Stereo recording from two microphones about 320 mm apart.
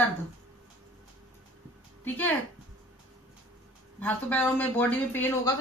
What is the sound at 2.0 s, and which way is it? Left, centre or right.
Speech, centre.